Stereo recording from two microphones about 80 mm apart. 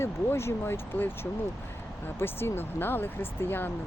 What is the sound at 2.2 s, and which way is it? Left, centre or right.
Speech, left.